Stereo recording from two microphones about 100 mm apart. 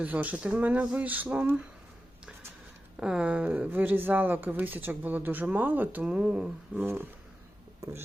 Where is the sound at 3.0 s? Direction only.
10° right (ahead or behind).